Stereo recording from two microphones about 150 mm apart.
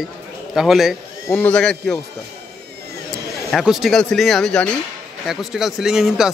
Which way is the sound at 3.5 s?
Centre (ahead or behind).